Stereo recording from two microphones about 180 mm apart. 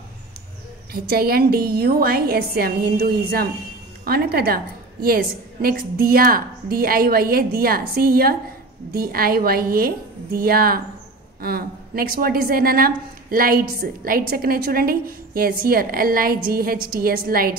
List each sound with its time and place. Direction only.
0.9 s a woman's voice: 60° right (ahead or behind)